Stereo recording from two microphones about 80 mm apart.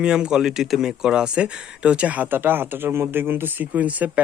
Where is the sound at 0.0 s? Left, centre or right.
Centre.